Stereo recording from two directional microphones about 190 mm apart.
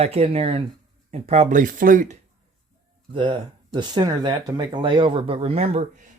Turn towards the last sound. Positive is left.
turn(degrees=-40)  # may be behind; listen again after turning